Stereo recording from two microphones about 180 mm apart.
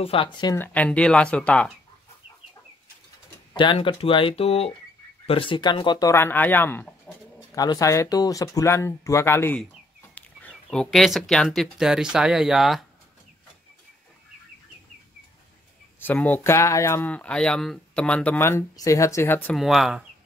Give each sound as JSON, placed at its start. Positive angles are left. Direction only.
{"t": 0.0, "sound": "speech", "side_deg": 30}
{"t": 0.6, "sound": "speech", "side_deg": 5}
{"t": 3.5, "sound": "speech", "side_deg": 30}
{"t": 16.0, "sound": "speech", "side_deg": 10}
{"t": 19.5, "sound": "speech", "side_deg": 0}